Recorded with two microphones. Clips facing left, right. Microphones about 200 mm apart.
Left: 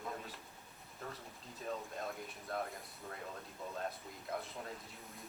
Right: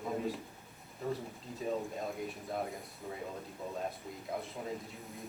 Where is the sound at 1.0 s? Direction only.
Centre (ahead or behind).